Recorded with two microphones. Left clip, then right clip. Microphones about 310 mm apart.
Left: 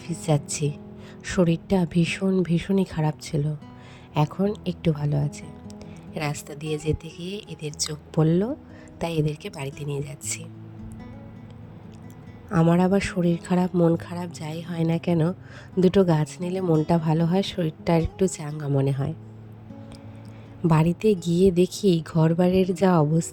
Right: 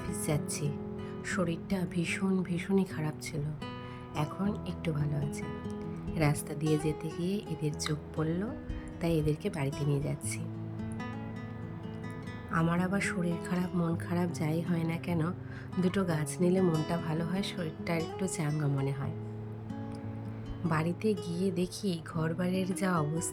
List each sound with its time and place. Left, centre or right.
0.1 s speech: centre
12.5 s speech: centre
20.7 s speech: left